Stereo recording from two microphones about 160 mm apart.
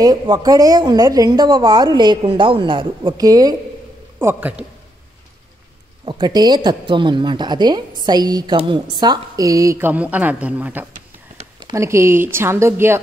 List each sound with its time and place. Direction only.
0.0 s a woman's voice: 25° right (ahead or behind)
6.0 s a woman's voice: 30° right (ahead or behind)